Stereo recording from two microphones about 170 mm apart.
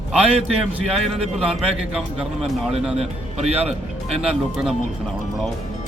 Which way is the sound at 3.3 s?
40° right (ahead or behind).